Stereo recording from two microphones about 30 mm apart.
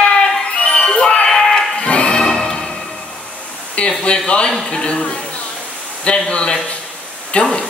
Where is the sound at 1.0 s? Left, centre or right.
Left.